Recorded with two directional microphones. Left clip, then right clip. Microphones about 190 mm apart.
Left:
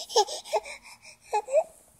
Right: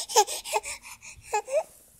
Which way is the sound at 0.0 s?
25° right (ahead or behind).